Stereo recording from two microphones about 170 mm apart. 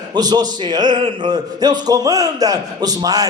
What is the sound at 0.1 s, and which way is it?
A man's voice, 25° right (ahead or behind).